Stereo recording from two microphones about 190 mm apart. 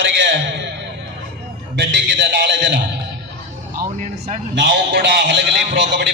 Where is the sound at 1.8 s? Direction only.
65° right (ahead or behind).